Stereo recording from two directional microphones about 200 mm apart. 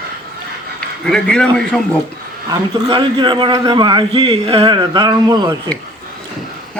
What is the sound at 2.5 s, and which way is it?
A man's voice, 20° right (ahead or behind).